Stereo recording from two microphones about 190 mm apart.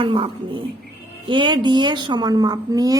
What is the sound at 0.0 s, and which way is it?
A woman's voice, 25° right (ahead or behind).